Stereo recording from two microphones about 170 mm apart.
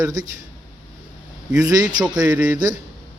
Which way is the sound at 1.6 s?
20° right (ahead or behind).